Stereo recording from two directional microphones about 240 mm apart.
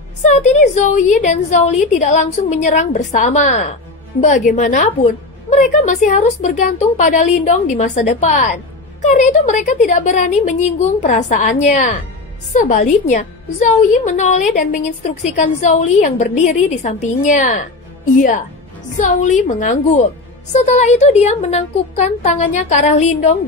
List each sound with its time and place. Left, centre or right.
0.2 s a woman's voice: left
12.6 s a woman's voice: left